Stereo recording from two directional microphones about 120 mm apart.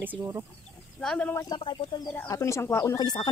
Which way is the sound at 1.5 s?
45° left (ahead or behind).